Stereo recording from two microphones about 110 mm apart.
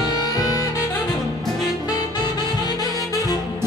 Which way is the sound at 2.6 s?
35° left (ahead or behind).